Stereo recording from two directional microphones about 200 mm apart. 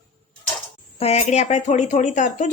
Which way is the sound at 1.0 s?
35° left (ahead or behind).